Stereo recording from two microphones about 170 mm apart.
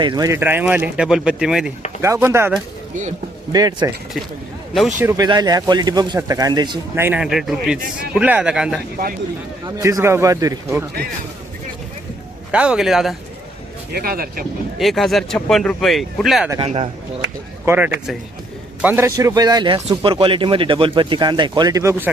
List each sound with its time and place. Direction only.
0.0 s speech: 25° right (ahead or behind); by 1.7 s 5° right (ahead or behind)
2.0 s a man's voice: 15° right (ahead or behind)
3.5 s a man's voice: 25° right (ahead or behind)
4.9 s a man's voice: 20° right (ahead or behind)
6.9 s speech: 10° right (ahead or behind)
9.6 s a man's voice: 20° right (ahead or behind)
12.5 s speech: 5° right (ahead or behind)
13.9 s speech: 60° right (ahead or behind)
14.8 s speech: centre (ahead or behind)
16.6 s a man's voice: 35° right (ahead or behind)
17.7 s a man's voice: 10° right (ahead or behind)